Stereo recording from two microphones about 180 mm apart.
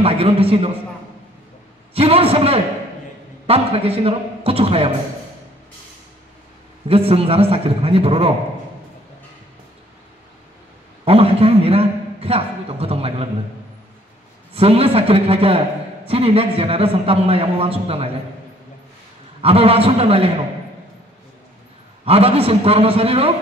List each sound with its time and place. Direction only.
0.0 s a man's voice: 30° right (ahead or behind)
2.0 s a man's voice: 35° right (ahead or behind)
6.9 s a man's voice: 35° right (ahead or behind)
11.1 s a man's voice: 30° right (ahead or behind)
14.5 s a man's voice: 35° right (ahead or behind)
19.4 s a man's voice: 30° right (ahead or behind)
22.0 s a man's voice: 35° right (ahead or behind)